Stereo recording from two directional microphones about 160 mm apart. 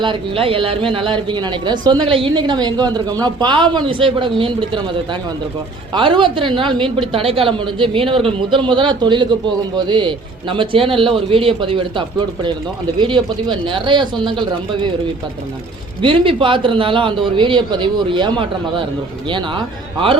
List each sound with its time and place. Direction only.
0.0 s speech: 35° right (ahead or behind)
5.9 s speech: 30° right (ahead or behind)
16.0 s speech: 30° right (ahead or behind)